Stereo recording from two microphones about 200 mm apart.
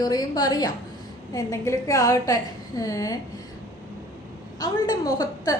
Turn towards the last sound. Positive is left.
turn(degrees=20)  # may be behind; listen again after turning